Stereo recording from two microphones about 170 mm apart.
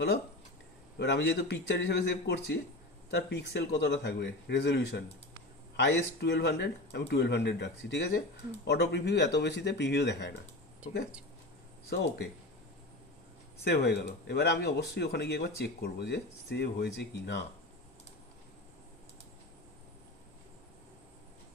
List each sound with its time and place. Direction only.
0.9 s speech: 90° left
3.1 s speech: 80° left
11.9 s speech: 90° left
13.7 s speech: 75° left (ahead or behind)